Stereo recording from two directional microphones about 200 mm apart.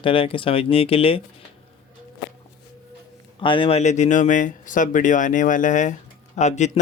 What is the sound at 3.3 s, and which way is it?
Speech, 25° left (ahead or behind).